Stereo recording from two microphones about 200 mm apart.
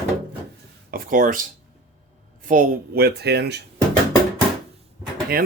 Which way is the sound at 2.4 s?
45° right (ahead or behind).